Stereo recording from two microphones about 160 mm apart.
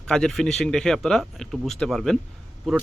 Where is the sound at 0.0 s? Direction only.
5° left (ahead or behind).